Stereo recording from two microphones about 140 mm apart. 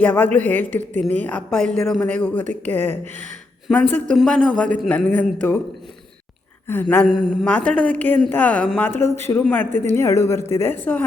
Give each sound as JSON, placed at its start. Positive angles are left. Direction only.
{"t": 0.0, "sound": "a woman's voice", "side_deg": 10}
{"t": 6.7, "sound": "a woman's voice", "side_deg": 15}